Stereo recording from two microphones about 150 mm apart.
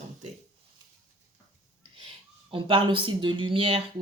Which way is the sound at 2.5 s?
35° right (ahead or behind).